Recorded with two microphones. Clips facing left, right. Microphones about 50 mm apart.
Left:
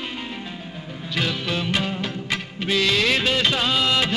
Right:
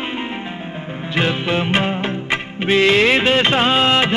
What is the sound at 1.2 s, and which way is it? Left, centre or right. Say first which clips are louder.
Music of bollywood: right 6 dB; right.